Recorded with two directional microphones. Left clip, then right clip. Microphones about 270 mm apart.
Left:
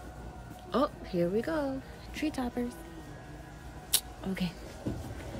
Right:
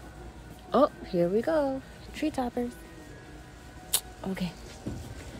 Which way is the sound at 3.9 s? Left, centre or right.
Centre.